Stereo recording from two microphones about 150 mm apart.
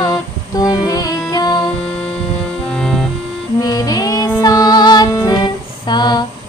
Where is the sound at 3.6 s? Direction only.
25° left (ahead or behind).